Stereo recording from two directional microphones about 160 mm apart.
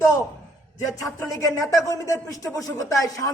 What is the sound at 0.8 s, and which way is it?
A man's voice, 20° left (ahead or behind).